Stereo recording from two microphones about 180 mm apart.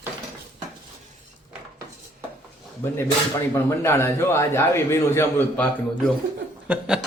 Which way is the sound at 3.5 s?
15° left (ahead or behind).